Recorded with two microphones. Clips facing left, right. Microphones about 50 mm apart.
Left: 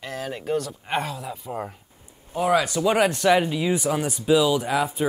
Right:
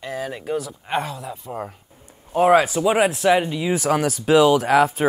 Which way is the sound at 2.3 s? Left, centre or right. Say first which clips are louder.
Right 6 dB; right.